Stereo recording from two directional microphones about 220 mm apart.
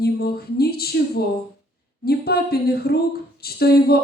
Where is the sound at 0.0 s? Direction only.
45° left (ahead or behind).